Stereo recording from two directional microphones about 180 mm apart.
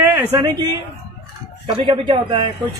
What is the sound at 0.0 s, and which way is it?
Speech, 20° right (ahead or behind).